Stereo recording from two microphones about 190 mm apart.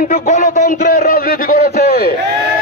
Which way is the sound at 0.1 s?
45° left (ahead or behind).